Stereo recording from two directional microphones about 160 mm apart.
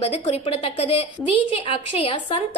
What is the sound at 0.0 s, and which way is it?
A woman's voice, 40° left (ahead or behind).